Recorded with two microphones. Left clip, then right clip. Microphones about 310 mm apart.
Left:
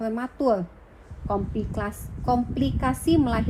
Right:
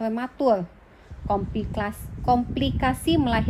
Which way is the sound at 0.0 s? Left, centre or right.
Right.